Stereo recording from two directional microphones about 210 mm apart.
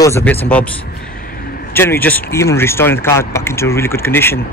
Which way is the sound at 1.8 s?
10° left (ahead or behind).